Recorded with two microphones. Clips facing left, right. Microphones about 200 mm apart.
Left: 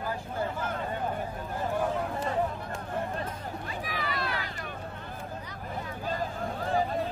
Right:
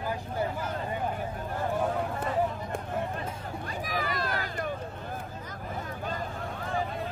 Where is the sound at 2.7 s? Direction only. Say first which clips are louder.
Right 4 dB; 55° right (ahead or behind).